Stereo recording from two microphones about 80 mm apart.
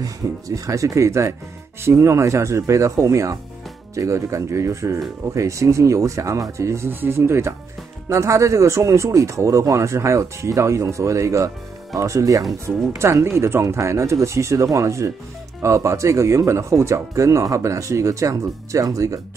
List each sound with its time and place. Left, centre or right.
0.0 s speech: right